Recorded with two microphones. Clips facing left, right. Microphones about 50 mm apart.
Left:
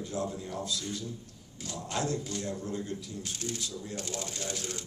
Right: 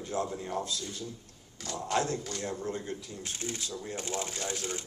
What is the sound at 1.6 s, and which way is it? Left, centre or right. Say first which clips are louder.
Speech: right 3 dB; right.